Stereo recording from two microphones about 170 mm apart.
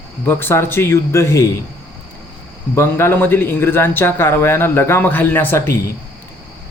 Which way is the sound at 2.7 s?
15° left (ahead or behind).